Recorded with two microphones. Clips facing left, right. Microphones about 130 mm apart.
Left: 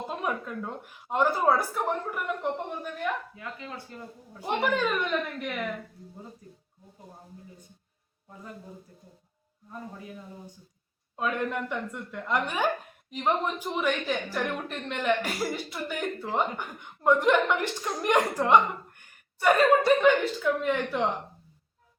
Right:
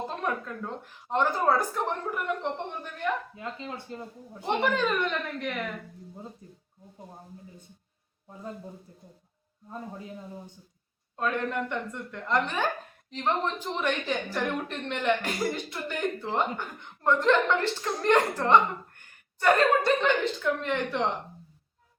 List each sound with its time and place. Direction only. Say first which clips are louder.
0.1 s a woman's voice: even; 10° left (ahead or behind)
3.3 s speech: right 2 dB; 25° right (ahead or behind)
4.4 s a woman's voice: right 1 dB; 5° left (ahead or behind)
6.4 s speech: even; 25° right (ahead or behind)
11.2 s a woman's voice: even; 5° left (ahead or behind)